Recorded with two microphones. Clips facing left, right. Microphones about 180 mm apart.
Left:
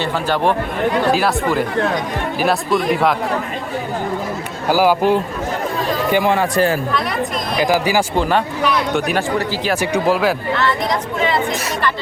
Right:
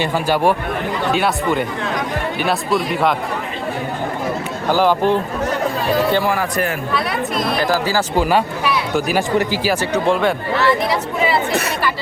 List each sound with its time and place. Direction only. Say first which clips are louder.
0.0 s speech: right 1 dB; 10° right (ahead or behind)
1.1 s speech: left 1 dB; centre (ahead or behind)
4.7 s a man's voice: left 1 dB; 10° left (ahead or behind)
6.3 s a man's voice: left 4 dB; 30° left (ahead or behind)
7.6 s speech: left 5 dB; 15° left (ahead or behind)
8.1 s speech: right 1 dB; 5° right (ahead or behind)